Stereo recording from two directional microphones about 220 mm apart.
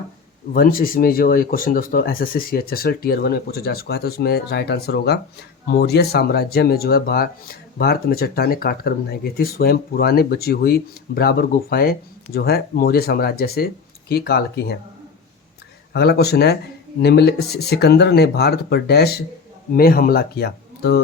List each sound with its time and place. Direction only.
0.5 s speech: 40° left (ahead or behind)
15.9 s speech: 50° left (ahead or behind)